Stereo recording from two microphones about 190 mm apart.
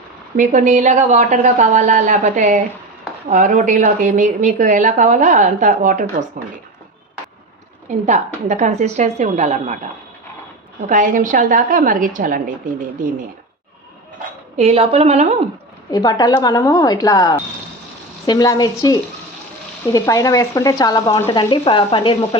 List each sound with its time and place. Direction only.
0.3 s a woman's voice: 40° right (ahead or behind)
7.9 s a woman's voice: 40° right (ahead or behind)
10.8 s a woman's voice: 45° right (ahead or behind)
14.5 s a woman's voice: 35° right (ahead or behind)
15.9 s speech: 20° left (ahead or behind)